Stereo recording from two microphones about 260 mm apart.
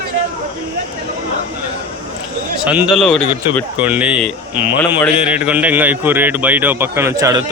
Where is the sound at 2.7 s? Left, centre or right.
Centre.